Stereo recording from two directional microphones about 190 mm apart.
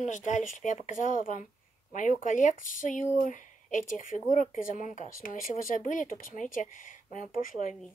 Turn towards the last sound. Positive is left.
turn(degrees=45)  # may be behind; listen again after turning